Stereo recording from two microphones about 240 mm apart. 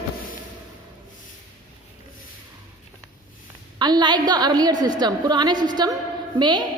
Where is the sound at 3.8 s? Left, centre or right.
Centre.